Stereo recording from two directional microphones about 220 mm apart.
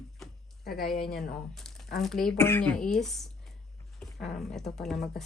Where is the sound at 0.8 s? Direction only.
40° left (ahead or behind).